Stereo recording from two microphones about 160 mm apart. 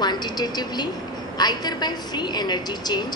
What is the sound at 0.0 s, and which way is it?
A woman's voice, 25° left (ahead or behind).